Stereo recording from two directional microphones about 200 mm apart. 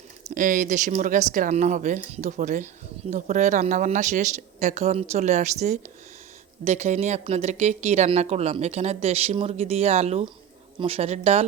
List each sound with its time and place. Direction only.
0.3 s speech: 40° right (ahead or behind)